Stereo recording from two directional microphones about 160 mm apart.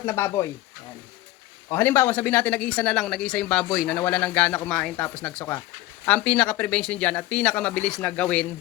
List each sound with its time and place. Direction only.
0.0 s speech: 15° left (ahead or behind)
1.7 s speech: 15° left (ahead or behind)